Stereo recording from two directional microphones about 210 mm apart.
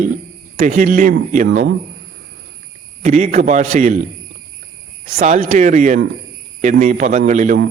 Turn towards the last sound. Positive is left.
turn(degrees=-35)  # may be behind; listen again after turning